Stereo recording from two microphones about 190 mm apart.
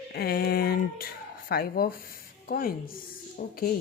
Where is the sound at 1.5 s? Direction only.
50° left (ahead or behind).